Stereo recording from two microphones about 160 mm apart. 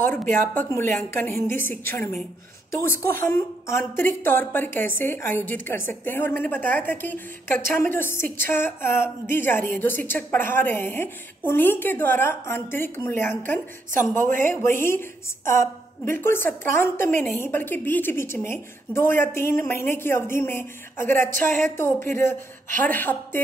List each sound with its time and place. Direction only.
0.0 s a woman's voice: 10° left (ahead or behind)
14.2 s speech: 55° right (ahead or behind)
14.8 s a woman's voice: 15° left (ahead or behind)
21.5 s speech: 55° right (ahead or behind)
21.7 s a woman's voice: 15° left (ahead or behind)